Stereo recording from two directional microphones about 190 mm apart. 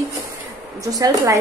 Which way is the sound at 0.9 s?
20° right (ahead or behind).